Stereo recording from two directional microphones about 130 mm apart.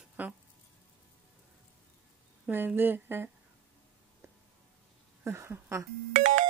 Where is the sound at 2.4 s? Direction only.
15° right (ahead or behind).